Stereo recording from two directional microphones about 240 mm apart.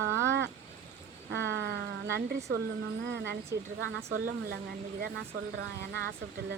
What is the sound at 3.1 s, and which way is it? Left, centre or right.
Speech, right.